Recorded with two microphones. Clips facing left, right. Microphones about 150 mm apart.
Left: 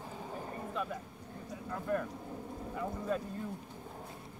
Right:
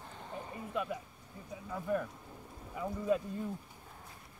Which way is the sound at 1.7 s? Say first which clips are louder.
Even; 5° right (ahead or behind).